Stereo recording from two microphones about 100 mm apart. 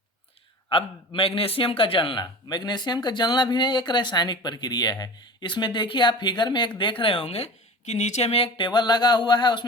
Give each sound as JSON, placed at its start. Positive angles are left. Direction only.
{"t": 0.7, "sound": "a man's voice", "side_deg": 65}
{"t": 2.2, "sound": "speech", "side_deg": 45}
{"t": 7.0, "sound": "speech", "side_deg": 65}
{"t": 8.5, "sound": "speech", "side_deg": 50}